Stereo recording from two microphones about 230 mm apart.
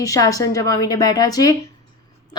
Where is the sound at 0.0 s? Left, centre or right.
Centre.